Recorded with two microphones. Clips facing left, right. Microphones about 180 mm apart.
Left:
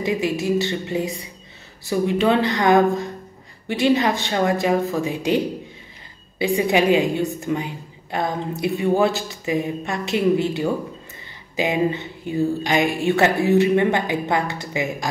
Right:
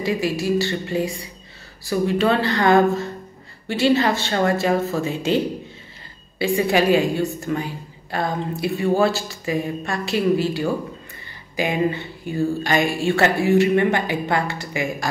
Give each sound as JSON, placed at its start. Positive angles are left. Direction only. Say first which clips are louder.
{"t": 0.0, "sound": "speech", "louder": "even", "side_deg": 20}